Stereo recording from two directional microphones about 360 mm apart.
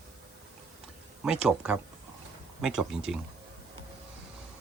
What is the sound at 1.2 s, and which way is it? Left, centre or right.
Speech, centre.